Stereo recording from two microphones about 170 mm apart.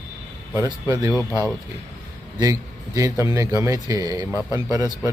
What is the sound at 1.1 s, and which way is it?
Speech, 20° left (ahead or behind).